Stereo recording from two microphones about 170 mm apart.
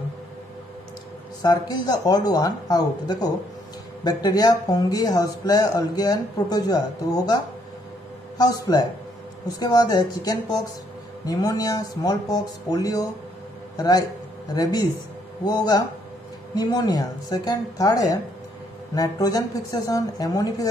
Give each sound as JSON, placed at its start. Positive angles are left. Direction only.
{"t": 1.4, "sound": "speech", "side_deg": 25}
{"t": 8.4, "sound": "speech", "side_deg": 20}